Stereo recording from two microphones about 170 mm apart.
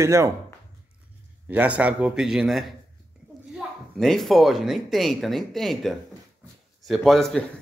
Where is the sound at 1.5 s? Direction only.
10° right (ahead or behind).